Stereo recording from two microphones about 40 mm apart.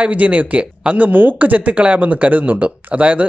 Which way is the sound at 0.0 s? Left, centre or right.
Right.